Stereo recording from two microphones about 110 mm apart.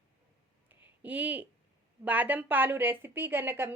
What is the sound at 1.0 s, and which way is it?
Speech, 15° right (ahead or behind).